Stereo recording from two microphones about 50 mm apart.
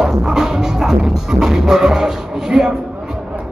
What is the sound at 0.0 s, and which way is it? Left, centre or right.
Music, centre.